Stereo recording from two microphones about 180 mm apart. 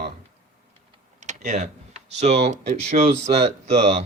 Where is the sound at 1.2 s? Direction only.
40° right (ahead or behind).